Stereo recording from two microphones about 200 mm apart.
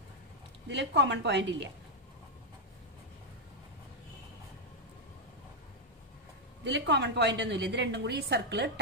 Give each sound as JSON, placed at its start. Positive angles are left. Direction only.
{"t": 0.7, "sound": "a woman's voice", "side_deg": -60}
{"t": 6.6, "sound": "a woman's voice", "side_deg": -60}